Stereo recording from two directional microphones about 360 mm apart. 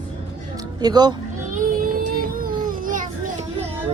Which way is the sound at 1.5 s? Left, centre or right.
Right.